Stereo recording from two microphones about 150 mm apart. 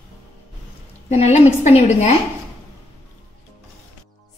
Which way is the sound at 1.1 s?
45° left (ahead or behind).